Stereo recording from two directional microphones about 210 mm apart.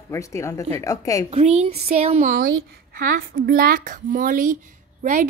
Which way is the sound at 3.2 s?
45° right (ahead or behind).